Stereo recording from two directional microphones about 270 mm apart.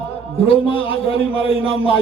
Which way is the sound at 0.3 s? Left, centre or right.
Left.